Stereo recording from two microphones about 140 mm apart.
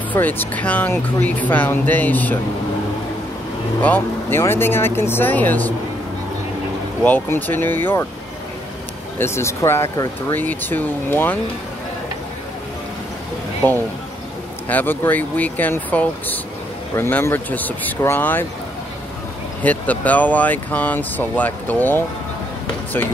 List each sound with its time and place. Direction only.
0.1 s speech: 15° left (ahead or behind)
3.8 s speech: 15° left (ahead or behind)
7.1 s speech: 15° left (ahead or behind)
9.2 s speech: 20° left (ahead or behind)
13.6 s speech: 15° left (ahead or behind)
19.6 s speech: 10° left (ahead or behind)